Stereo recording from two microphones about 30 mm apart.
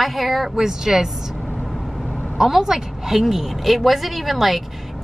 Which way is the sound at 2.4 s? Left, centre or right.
Centre.